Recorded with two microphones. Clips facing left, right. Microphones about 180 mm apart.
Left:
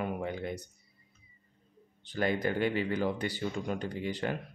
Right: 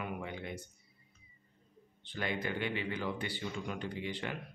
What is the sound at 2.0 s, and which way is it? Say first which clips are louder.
Speech: left 7 dB; 40° left (ahead or behind).